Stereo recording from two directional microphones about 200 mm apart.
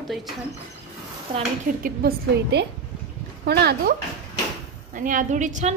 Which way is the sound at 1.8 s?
55° right (ahead or behind).